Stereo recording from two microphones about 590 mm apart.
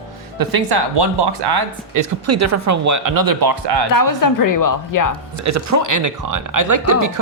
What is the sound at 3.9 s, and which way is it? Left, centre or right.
A woman's voice, left.